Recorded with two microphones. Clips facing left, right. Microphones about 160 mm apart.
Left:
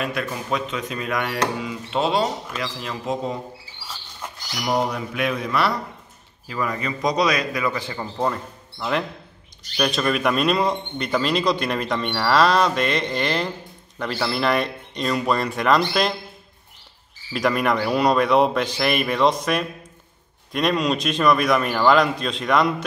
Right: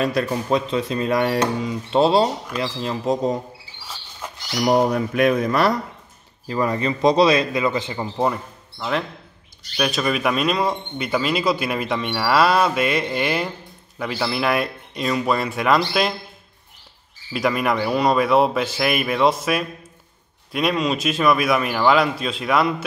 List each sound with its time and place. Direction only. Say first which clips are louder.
0.0 s speech: right 5 dB; 35° right (ahead or behind)
4.6 s mantra: right 5 dB; 45° right (ahead or behind)
6.4 s a man's voice: right 5 dB; 35° right (ahead or behind); by 8.4 s 15° right (ahead or behind)
8.7 s speech: even; centre (ahead or behind)
17.3 s speech: even; centre (ahead or behind)